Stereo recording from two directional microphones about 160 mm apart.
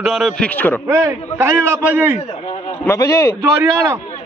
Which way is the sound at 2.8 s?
20° left (ahead or behind).